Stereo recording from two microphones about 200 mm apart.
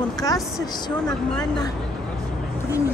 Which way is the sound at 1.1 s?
5° left (ahead or behind).